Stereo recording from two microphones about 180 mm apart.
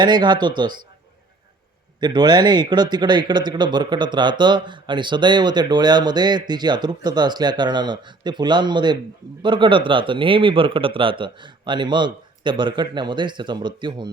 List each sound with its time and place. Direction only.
0.0 s speech: 25° right (ahead or behind)
2.0 s speech: 25° right (ahead or behind)